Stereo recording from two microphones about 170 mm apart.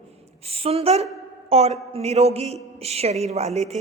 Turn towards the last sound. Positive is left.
turn(degrees=-40)  # may be behind; listen again after turning